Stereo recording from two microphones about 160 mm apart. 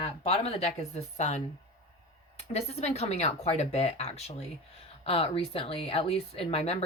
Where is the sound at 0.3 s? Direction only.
40° left (ahead or behind).